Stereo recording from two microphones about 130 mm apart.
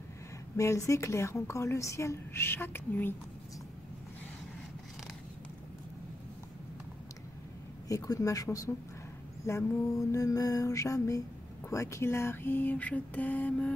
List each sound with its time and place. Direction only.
0.6 s a woman's voice: 25° left (ahead or behind)
7.9 s a woman's voice: 25° left (ahead or behind)
11.7 s a sound: 25° left (ahead or behind)